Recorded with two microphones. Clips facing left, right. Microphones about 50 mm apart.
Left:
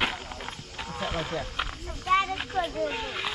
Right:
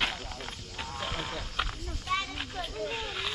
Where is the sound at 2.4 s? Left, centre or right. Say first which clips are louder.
Left 8 dB; centre.